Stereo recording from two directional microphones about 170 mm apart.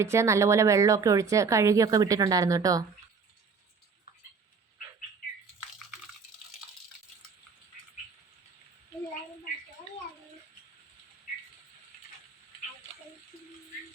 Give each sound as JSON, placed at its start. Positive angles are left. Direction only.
{"t": 0.0, "sound": "speech", "side_deg": -15}